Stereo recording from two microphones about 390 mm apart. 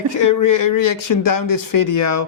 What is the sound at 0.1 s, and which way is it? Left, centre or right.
Speech, left.